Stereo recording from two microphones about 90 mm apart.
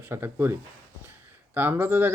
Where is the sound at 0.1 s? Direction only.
25° right (ahead or behind).